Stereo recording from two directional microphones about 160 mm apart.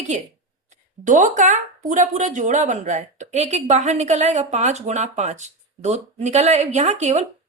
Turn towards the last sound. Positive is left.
turn(degrees=-45)  # may be behind; listen again after turning